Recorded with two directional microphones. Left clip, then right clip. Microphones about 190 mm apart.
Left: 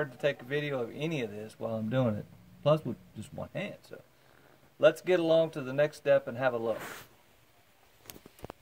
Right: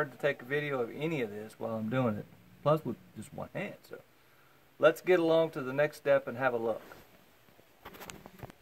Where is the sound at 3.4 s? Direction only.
10° left (ahead or behind).